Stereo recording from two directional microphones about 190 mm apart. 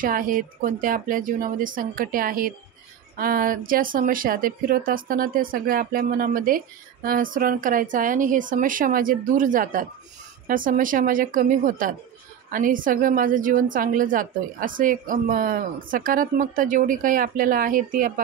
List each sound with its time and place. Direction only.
0.0 s speech: 45° right (ahead or behind)